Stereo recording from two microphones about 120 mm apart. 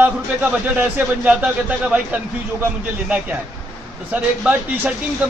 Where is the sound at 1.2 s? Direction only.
10° right (ahead or behind).